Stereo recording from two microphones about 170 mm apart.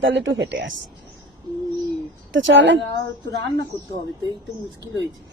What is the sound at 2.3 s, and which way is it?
Speech, 90° right.